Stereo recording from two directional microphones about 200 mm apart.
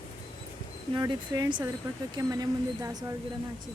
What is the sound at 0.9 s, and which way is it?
Speech, 20° right (ahead or behind).